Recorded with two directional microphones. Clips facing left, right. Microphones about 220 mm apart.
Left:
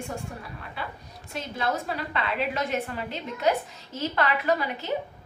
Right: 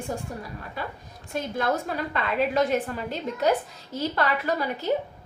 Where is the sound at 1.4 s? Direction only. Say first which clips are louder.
Right 3 dB; 50° right (ahead or behind).